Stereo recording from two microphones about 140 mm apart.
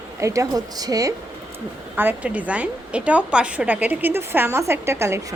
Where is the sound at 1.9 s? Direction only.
10° right (ahead or behind).